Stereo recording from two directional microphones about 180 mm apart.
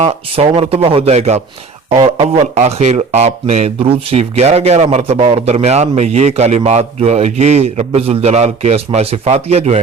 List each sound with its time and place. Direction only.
0.0 s speech: 35° right (ahead or behind)